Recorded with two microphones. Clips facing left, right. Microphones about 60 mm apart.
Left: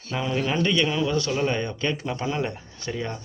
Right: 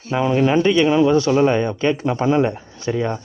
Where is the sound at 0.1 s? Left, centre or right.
Right.